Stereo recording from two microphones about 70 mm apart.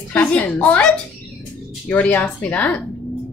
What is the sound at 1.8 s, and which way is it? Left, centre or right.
Speech, left.